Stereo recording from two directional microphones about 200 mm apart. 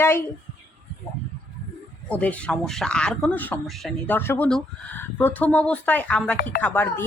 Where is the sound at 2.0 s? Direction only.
5° left (ahead or behind).